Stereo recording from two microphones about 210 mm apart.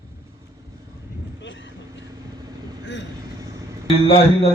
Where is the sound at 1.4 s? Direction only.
60° left (ahead or behind).